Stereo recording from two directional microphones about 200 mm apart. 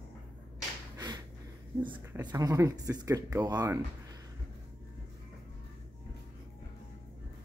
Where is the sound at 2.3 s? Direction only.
15° right (ahead or behind).